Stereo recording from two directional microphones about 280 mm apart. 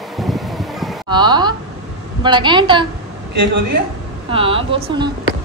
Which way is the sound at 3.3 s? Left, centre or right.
Right.